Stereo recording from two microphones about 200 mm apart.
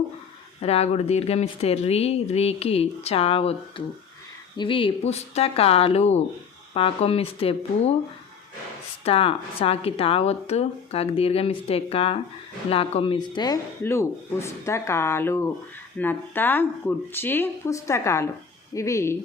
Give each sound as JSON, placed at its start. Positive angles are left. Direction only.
{"t": 0.6, "sound": "speech", "side_deg": 30}
{"t": 9.0, "sound": "speech", "side_deg": 30}